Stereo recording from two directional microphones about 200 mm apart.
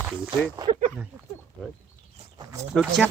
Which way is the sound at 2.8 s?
5° right (ahead or behind).